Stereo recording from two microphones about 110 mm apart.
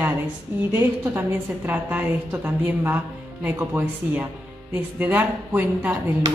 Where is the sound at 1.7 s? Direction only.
15° right (ahead or behind).